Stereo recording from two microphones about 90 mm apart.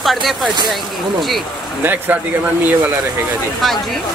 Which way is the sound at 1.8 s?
20° right (ahead or behind).